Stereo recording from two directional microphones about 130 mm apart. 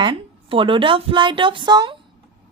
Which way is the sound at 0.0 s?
40° right (ahead or behind).